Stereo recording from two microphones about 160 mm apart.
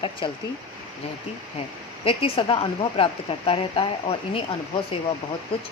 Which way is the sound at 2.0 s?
35° left (ahead or behind).